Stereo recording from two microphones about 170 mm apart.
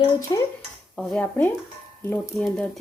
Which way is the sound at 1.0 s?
10° left (ahead or behind).